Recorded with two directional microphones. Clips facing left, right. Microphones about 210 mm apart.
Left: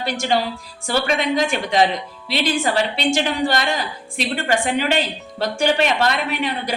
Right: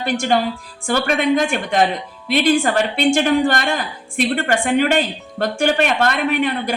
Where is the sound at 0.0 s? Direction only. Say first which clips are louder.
Right 3 dB; 50° right (ahead or behind).